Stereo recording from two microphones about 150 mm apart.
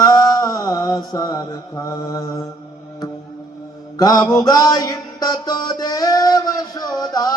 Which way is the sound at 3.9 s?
25° left (ahead or behind).